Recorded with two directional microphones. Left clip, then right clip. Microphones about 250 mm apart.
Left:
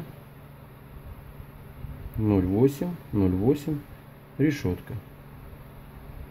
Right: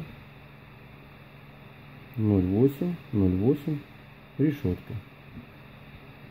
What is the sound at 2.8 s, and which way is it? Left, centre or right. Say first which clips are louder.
Speech: even; centre.